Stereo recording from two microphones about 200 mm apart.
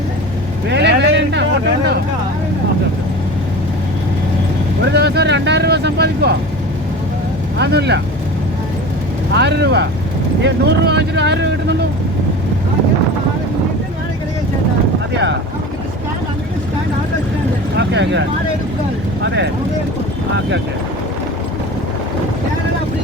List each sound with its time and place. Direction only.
0.7 s vehicle: 60° right (ahead or behind)
4.9 s speech: 55° right (ahead or behind)
7.6 s speech: 55° right (ahead or behind)
9.3 s speech: 60° right (ahead or behind)
17.7 s speech: 60° right (ahead or behind)